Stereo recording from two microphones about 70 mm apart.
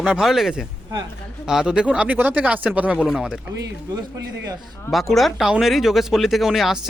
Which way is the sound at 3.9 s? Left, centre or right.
Right.